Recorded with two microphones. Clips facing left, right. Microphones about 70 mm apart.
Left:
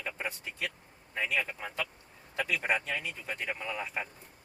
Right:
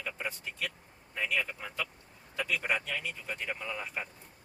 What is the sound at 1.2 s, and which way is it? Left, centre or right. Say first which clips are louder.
Speech: left 1 dB; left.